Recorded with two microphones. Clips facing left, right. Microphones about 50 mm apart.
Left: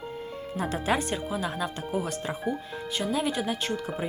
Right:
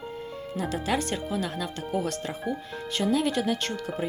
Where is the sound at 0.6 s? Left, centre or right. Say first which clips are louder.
Left 1 dB; left.